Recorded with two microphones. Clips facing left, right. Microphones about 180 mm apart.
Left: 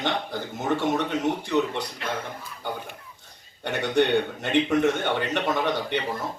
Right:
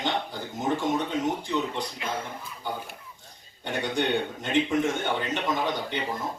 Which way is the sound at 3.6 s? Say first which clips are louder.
Left 5 dB; 65° left (ahead or behind).